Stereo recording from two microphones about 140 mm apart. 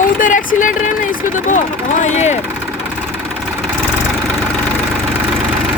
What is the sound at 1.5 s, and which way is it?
Speech, 60° left (ahead or behind).